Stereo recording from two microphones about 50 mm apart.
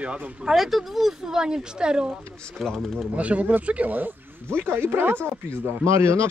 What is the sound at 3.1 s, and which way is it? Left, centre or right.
Speech, right.